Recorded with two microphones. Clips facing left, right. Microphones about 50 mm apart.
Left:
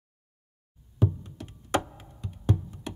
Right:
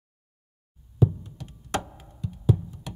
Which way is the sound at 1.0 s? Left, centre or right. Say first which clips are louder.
Right 4 dB; centre.